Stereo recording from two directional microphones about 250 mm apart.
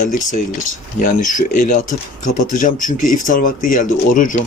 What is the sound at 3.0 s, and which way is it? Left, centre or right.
Speech, left.